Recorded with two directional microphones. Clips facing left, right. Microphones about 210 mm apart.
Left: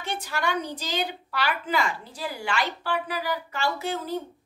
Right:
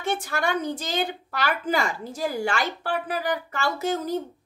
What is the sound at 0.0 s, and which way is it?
A woman's voice, 50° right (ahead or behind).